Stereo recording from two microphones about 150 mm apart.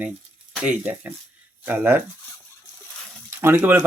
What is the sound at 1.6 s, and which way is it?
Speech, 15° right (ahead or behind).